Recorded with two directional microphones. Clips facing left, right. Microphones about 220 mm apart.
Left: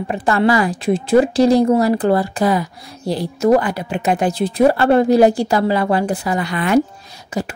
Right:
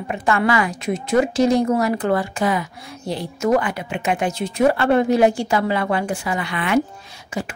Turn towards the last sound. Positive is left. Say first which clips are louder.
# left 4 dB
turn(degrees=40)  # may be behind; listen again after turning